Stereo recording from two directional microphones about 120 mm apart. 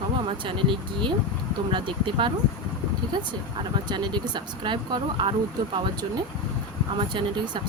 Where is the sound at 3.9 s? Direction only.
40° right (ahead or behind).